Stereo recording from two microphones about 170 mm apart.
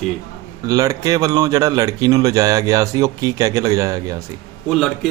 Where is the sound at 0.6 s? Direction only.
20° right (ahead or behind).